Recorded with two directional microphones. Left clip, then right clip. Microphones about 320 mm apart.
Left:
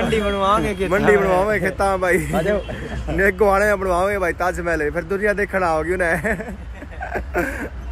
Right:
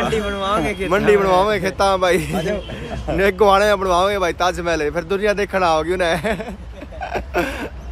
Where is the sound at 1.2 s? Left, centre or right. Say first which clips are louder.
Right 2 dB; centre.